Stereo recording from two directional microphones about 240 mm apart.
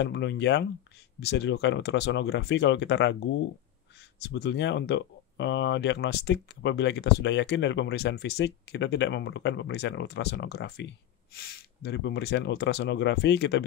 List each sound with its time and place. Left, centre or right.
0.0 s speech: left
4.2 s speech: left